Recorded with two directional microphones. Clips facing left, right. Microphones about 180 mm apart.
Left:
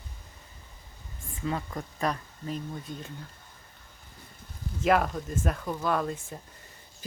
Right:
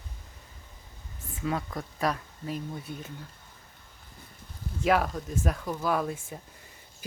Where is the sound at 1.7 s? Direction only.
5° right (ahead or behind).